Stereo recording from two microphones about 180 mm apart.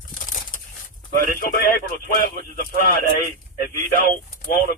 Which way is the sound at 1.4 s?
50° left (ahead or behind).